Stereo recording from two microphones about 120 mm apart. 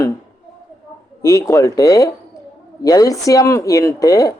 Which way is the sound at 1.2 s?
25° left (ahead or behind).